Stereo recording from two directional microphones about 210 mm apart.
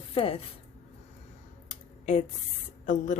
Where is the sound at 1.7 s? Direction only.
35° left (ahead or behind).